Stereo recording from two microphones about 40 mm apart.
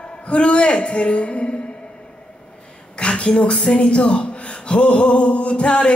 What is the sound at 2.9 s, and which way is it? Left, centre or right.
A woman's voice, left.